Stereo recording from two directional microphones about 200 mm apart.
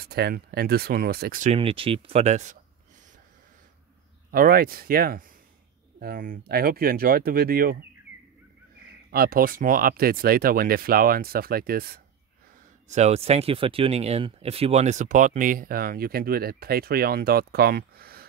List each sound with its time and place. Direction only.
0.0 s speech: 50° right (ahead or behind)
1.5 s speech: 25° right (ahead or behind)
4.3 s speech: 45° right (ahead or behind)
9.1 s speech: 45° right (ahead or behind)
12.8 s speech: 35° right (ahead or behind)